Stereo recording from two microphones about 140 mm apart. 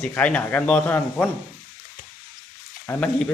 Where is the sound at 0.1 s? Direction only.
10° left (ahead or behind).